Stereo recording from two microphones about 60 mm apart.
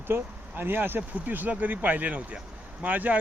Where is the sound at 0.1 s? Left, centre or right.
Right.